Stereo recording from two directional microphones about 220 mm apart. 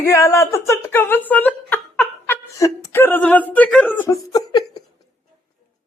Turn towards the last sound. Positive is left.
turn(degrees=15)  # may be behind; listen again after turning